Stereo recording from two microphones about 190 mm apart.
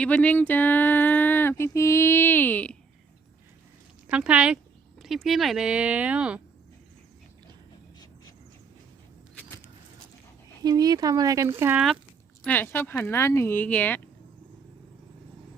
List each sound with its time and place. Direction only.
0.0 s speech: 5° left (ahead or behind)
4.1 s speech: 5° right (ahead or behind)
10.6 s speech: 20° right (ahead or behind); by 11.9 s 5° right (ahead or behind)
12.5 s speech: 10° left (ahead or behind)